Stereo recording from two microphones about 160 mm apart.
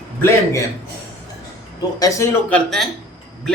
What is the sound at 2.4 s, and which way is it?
Speech, 5° left (ahead or behind).